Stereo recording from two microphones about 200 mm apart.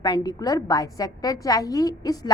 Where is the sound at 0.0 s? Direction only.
20° left (ahead or behind).